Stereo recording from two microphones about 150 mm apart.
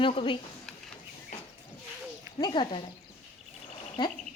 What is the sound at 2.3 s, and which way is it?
Speech, 35° left (ahead or behind).